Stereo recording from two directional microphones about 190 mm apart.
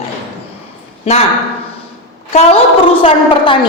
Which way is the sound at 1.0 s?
35° left (ahead or behind).